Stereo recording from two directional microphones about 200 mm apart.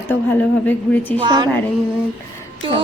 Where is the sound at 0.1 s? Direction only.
10° left (ahead or behind).